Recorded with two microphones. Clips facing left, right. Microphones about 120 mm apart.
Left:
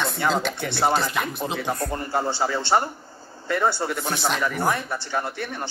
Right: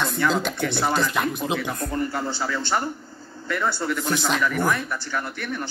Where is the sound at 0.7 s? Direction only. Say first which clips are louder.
Left 3 dB; 60° left (ahead or behind).